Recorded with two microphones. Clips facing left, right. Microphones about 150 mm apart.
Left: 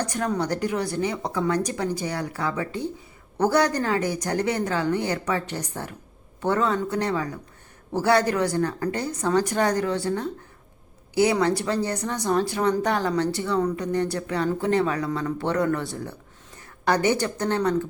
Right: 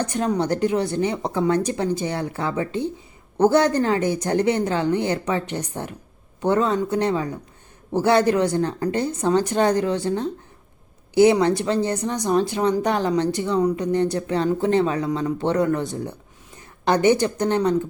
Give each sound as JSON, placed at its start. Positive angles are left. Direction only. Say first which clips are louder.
{"t": 0.0, "sound": "a woman's voice", "louder": "right 3 dB", "side_deg": -20}